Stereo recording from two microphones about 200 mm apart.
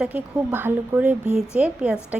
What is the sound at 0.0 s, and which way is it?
A woman's voice, 10° right (ahead or behind).